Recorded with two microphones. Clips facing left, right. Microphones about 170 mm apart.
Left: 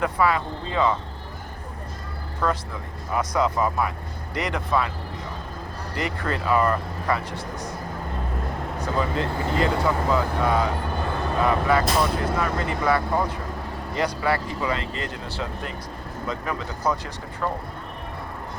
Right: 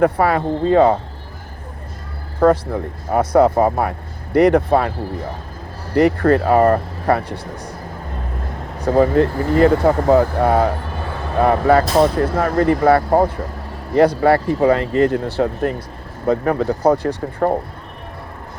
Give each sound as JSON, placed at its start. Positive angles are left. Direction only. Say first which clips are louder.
{"t": 0.0, "sound": "speech", "louder": "right 7 dB", "side_deg": -55}
{"t": 2.4, "sound": "speech", "louder": "right 12 dB", "side_deg": -55}
{"t": 7.3, "sound": "speech", "louder": "right 2 dB", "side_deg": -30}
{"t": 9.0, "sound": "speech", "louder": "right 12 dB", "side_deg": -55}